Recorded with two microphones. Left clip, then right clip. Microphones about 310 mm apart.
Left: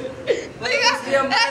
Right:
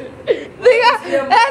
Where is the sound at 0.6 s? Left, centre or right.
Centre.